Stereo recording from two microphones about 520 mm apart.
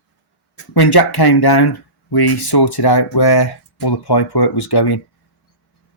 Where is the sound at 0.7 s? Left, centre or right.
Left.